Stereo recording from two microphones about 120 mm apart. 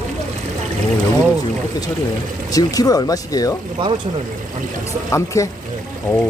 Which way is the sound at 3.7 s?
40° right (ahead or behind).